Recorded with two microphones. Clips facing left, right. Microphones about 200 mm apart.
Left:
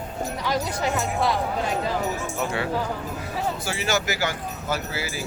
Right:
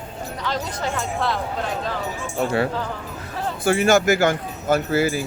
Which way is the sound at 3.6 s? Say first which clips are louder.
Right 14 dB; 55° right (ahead or behind).